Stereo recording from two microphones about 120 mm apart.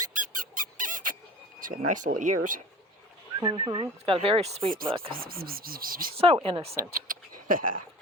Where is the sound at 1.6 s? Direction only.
90° right.